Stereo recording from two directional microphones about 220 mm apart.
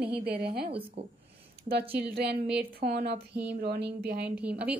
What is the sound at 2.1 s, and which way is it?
A woman's voice, 45° right (ahead or behind).